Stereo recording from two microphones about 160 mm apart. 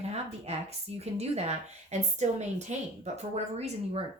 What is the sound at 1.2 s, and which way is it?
A woman's voice, 45° right (ahead or behind).